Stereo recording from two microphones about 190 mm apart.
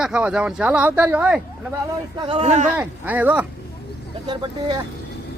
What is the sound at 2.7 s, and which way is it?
Speech, 5° right (ahead or behind).